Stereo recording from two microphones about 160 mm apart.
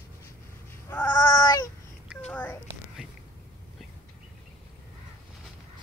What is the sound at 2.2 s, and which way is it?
Whispering, 10° left (ahead or behind).